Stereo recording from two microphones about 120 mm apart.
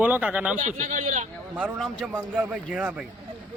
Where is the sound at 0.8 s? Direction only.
90° right.